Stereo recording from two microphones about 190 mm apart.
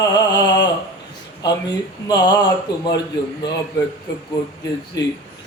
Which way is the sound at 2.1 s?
20° left (ahead or behind).